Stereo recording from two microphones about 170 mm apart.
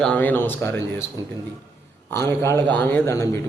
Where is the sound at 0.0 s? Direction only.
10° left (ahead or behind).